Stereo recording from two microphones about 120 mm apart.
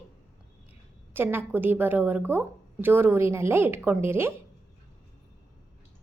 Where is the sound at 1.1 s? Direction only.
20° right (ahead or behind).